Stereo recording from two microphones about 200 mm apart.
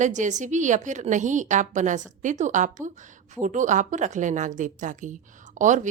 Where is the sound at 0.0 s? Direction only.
35° right (ahead or behind).